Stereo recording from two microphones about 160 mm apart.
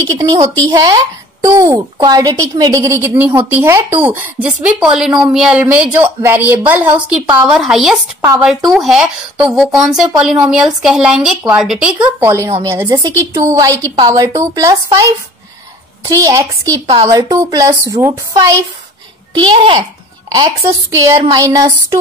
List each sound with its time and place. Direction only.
0.2 s a child's voice: 25° right (ahead or behind)
19.3 s a child's voice: 30° right (ahead or behind)